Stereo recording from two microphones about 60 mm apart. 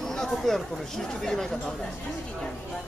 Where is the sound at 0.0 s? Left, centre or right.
Centre.